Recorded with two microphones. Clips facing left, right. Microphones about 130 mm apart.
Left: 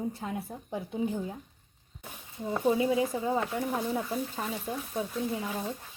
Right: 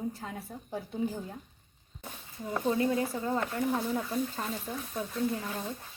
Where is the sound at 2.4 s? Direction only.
15° left (ahead or behind).